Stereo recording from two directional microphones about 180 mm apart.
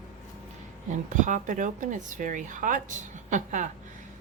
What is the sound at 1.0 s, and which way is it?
Speech, 45° right (ahead or behind).